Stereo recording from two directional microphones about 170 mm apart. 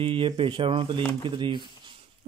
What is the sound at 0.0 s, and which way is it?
Speech, 30° right (ahead or behind).